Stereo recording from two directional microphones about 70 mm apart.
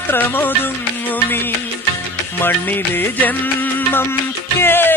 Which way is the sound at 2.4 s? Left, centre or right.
Left.